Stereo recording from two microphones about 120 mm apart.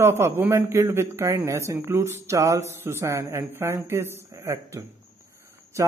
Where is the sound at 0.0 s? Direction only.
20° right (ahead or behind).